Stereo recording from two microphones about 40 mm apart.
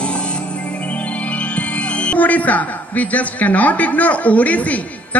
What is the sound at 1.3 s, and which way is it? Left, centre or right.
Music, left.